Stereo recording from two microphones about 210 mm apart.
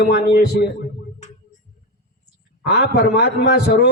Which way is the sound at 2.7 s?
50° left (ahead or behind).